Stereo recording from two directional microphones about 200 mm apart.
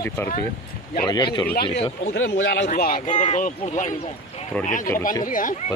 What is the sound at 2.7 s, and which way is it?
Speech, 45° left (ahead or behind).